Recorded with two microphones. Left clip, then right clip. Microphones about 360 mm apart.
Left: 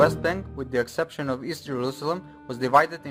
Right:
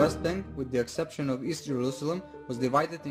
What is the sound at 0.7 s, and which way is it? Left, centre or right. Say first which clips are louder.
Speech: left 5 dB; left.